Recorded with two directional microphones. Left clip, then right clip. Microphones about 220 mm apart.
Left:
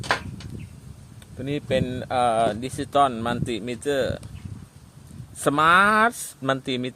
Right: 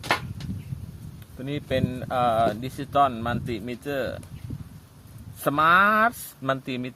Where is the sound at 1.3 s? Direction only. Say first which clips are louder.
Left 3 dB; 30° left (ahead or behind).